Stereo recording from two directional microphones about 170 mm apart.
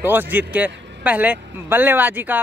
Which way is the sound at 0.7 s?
90° right.